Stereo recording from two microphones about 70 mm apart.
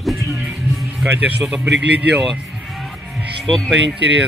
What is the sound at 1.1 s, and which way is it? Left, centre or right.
Speech, right.